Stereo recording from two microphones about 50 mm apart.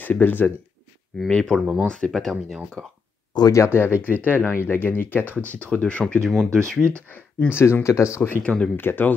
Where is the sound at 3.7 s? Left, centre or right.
Left.